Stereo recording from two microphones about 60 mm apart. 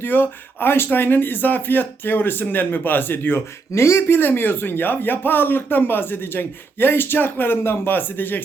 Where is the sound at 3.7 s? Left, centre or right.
Left.